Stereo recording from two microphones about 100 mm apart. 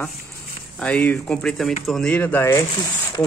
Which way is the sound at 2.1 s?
15° left (ahead or behind).